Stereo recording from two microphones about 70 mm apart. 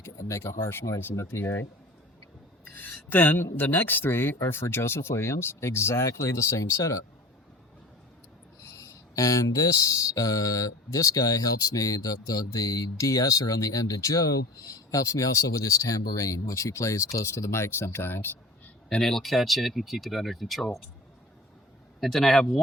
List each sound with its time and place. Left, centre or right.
0.0 s speech: left
2.7 s speech: left
8.8 s speech: left
18.9 s speech: centre
22.0 s speech: centre